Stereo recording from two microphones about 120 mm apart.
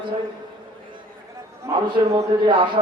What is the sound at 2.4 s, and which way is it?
Mantra, 45° right (ahead or behind).